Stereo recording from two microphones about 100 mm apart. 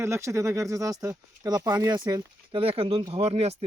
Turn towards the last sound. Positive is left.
turn(degrees=-90)